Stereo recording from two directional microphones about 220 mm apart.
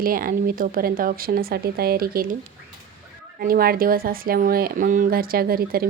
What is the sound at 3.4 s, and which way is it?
A woman's voice, 40° right (ahead or behind).